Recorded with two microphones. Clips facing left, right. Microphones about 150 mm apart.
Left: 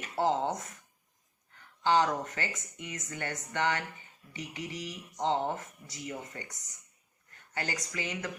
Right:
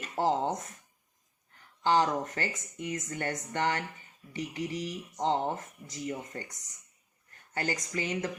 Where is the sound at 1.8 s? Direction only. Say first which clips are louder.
Right 1 dB; 35° right (ahead or behind).